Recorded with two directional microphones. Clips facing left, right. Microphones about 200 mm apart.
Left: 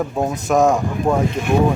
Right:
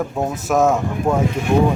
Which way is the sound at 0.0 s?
Centre (ahead or behind).